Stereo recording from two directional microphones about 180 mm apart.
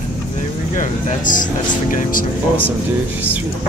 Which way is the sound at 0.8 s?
45° left (ahead or behind).